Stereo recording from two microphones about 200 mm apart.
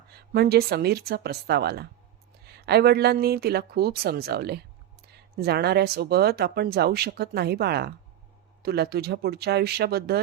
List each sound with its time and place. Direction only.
0.1 s speech: 50° right (ahead or behind)